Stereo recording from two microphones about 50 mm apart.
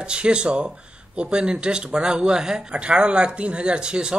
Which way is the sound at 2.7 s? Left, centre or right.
Right.